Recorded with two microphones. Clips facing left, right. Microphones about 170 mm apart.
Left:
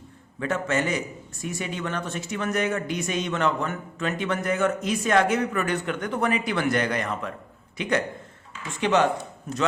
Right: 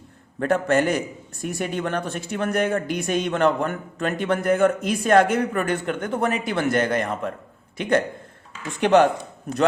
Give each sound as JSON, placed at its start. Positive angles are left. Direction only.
{"t": 0.3, "sound": "a man's voice", "side_deg": -60}